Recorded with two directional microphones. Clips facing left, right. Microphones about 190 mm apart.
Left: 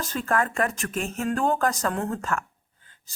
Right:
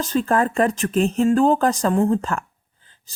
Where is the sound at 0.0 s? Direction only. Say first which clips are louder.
Right 6 dB; 30° right (ahead or behind).